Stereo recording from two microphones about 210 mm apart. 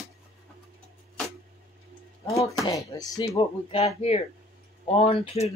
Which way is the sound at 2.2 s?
15° left (ahead or behind).